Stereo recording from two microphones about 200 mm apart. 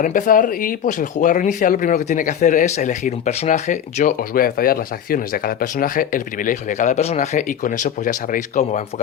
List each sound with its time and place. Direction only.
0.0 s speech: 40° left (ahead or behind)